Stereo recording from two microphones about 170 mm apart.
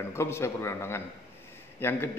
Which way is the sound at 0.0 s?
15° left (ahead or behind).